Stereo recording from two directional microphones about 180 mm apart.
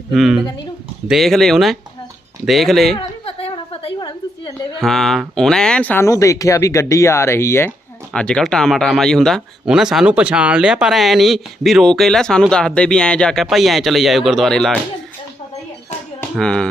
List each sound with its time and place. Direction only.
0.1 s speech: centre (ahead or behind)
2.9 s a sound: 35° left (ahead or behind)
4.8 s speech: centre (ahead or behind)
16.4 s speech: 5° left (ahead or behind)